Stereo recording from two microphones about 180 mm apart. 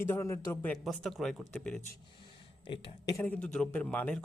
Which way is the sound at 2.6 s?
30° left (ahead or behind).